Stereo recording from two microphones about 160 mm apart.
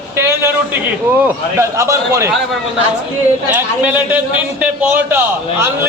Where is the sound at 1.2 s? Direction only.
15° right (ahead or behind).